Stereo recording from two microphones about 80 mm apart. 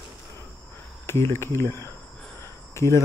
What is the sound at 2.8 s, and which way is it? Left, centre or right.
Cricket, left.